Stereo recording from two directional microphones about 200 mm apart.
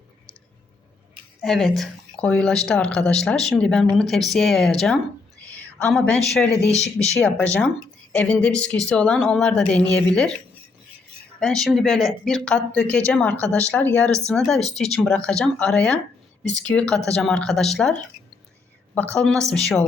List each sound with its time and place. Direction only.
1.4 s speech: centre (ahead or behind)
5.5 s a sound: 10° left (ahead or behind)
6.7 s speech: 35° left (ahead or behind)
7.2 s speech: 5° left (ahead or behind)
11.3 s a woman's voice: centre (ahead or behind)
19.1 s speech: 5° left (ahead or behind)